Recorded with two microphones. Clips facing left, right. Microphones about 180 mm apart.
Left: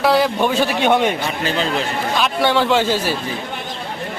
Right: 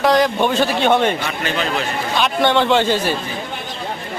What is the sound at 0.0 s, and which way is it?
A man's voice, 5° left (ahead or behind).